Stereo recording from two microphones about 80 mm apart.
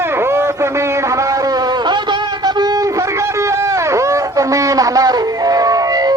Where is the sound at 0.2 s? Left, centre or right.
Right.